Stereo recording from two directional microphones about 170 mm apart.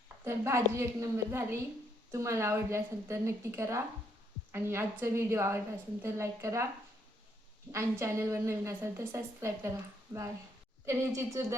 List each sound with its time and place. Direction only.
0.3 s a woman's voice: 15° right (ahead or behind)
7.7 s a woman's voice: 15° right (ahead or behind)
10.8 s a woman's voice: 20° right (ahead or behind)